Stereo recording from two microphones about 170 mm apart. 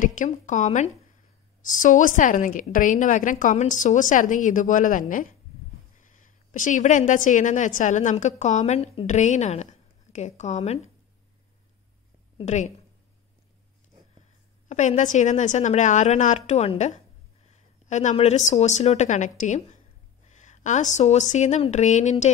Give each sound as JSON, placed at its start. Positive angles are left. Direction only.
{"t": 0.0, "sound": "a woman's voice", "side_deg": 50}
{"t": 12.4, "sound": "a woman's voice", "side_deg": 45}
{"t": 14.7, "sound": "a woman's voice", "side_deg": 45}